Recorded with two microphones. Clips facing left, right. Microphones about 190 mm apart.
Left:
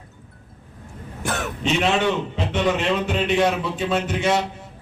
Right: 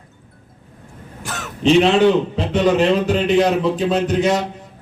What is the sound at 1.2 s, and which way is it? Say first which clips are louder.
Throat clearing: left 4 dB; 55° left (ahead or behind).